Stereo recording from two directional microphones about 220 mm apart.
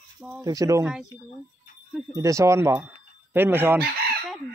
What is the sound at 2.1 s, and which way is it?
Speech, 15° right (ahead or behind).